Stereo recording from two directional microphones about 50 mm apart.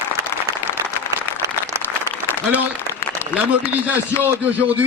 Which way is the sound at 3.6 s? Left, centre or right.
Right.